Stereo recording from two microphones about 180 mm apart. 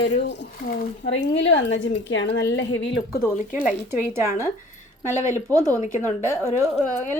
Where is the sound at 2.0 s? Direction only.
90° left.